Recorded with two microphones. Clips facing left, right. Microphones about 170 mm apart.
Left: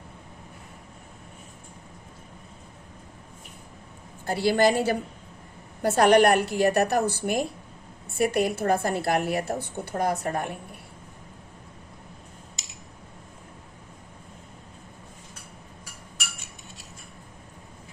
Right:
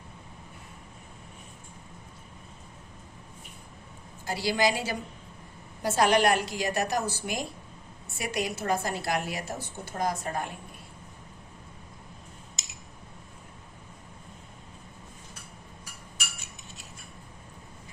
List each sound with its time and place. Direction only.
4.3 s a woman's voice: 55° left (ahead or behind)